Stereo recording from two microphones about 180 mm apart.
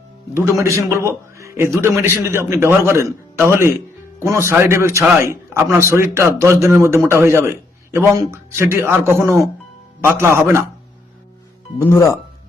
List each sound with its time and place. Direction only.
0.3 s speech: 15° right (ahead or behind)
11.8 s speech: 15° left (ahead or behind)